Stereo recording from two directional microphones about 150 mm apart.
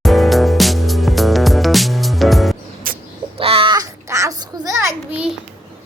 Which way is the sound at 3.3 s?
40° right (ahead or behind).